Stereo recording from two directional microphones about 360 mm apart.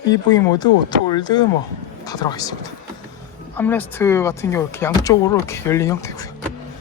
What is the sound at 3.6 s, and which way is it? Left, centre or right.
Speech, centre.